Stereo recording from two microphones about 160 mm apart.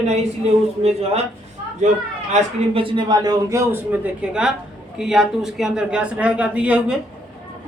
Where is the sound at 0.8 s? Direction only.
40° right (ahead or behind).